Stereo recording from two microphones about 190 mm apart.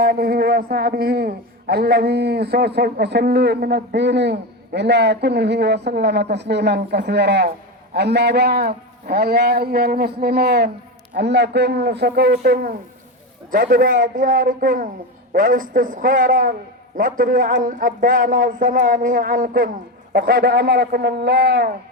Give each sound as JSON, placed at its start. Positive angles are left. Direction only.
{"t": 0.0, "sound": "a man's voice", "side_deg": -55}
{"t": 13.5, "sound": "a man's voice", "side_deg": -50}